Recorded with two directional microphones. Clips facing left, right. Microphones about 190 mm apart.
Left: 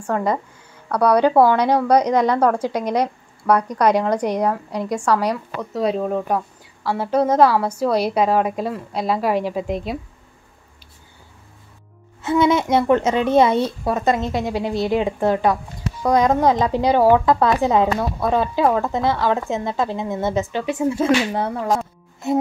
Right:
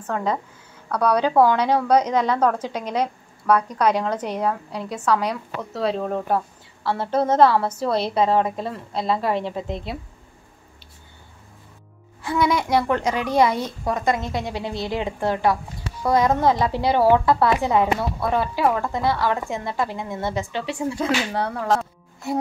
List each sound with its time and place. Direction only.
0.0 s a woman's voice: 10° left (ahead or behind)
6.8 s a woman's voice: 10° left (ahead or behind)
12.2 s a woman's voice: 25° left (ahead or behind)
18.2 s a woman's voice: 20° left (ahead or behind)